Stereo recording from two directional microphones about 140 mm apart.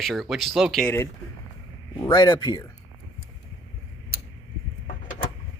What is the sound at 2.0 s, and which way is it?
Speech, 30° left (ahead or behind).